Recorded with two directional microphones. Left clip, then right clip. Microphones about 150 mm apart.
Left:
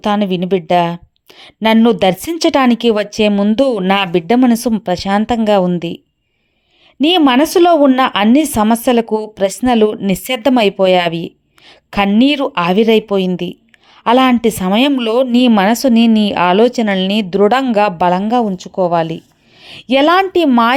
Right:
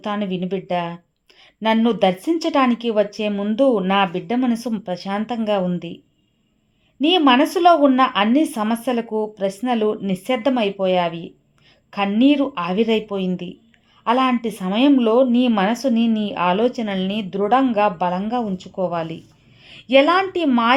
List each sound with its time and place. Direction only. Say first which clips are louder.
0.0 s speech: left 9 dB; 45° left (ahead or behind)
7.0 s a woman's voice: left 4 dB; 50° left (ahead or behind)